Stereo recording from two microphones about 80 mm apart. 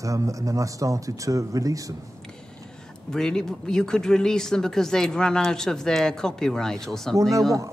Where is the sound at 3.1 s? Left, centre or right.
Centre.